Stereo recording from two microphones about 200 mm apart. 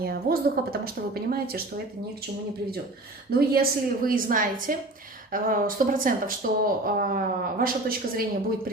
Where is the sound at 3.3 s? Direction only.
50° right (ahead or behind).